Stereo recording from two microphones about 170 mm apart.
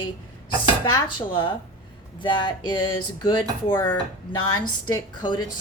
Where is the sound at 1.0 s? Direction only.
30° left (ahead or behind).